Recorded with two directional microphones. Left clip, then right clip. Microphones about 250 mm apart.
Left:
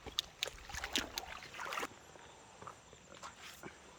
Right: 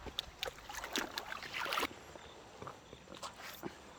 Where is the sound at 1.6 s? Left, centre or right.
Right.